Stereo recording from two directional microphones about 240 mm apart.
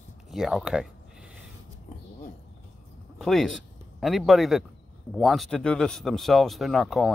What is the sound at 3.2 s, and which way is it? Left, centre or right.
Speech, centre.